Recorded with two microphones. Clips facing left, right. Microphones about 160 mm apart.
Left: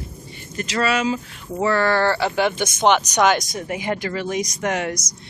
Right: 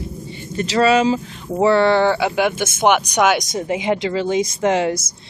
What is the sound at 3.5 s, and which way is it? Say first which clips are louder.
Speech: right 5 dB; 25° right (ahead or behind).